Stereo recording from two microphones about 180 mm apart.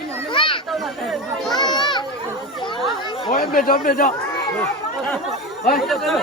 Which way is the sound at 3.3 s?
55° left (ahead or behind).